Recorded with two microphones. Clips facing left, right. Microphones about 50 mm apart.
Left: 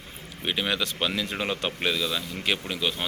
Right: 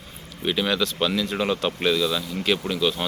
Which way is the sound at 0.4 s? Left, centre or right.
Centre.